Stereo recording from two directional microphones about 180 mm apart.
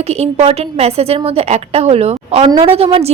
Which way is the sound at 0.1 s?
35° right (ahead or behind).